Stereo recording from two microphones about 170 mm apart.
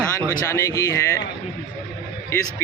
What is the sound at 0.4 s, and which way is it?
Speech, 15° left (ahead or behind).